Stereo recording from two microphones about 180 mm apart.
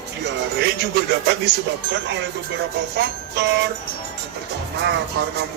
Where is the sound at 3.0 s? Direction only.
70° right (ahead or behind).